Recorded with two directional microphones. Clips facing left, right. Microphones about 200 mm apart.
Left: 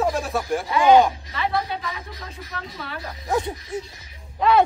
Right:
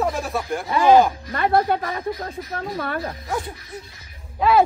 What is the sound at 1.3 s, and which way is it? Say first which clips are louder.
Speech: right 6 dB; 50° right (ahead or behind).